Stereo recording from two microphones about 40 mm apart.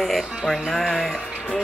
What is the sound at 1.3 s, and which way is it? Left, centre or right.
Music, left.